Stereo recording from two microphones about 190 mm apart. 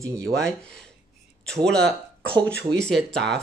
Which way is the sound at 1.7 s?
5° left (ahead or behind).